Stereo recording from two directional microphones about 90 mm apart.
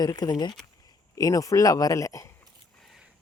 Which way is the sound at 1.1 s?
40° left (ahead or behind).